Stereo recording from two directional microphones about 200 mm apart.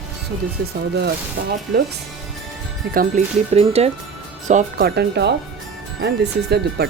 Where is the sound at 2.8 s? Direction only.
50° right (ahead or behind).